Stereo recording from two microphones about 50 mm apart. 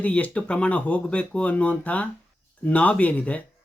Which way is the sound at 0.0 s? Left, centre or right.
Left.